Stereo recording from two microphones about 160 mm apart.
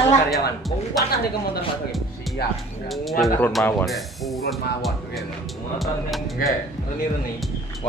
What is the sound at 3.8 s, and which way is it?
Speech, centre (ahead or behind).